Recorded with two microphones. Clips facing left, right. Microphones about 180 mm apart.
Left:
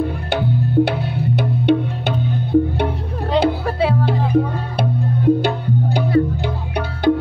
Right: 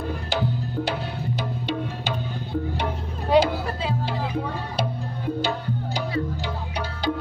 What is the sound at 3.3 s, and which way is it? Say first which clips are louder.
Music: left 3 dB; 65° left (ahead or behind).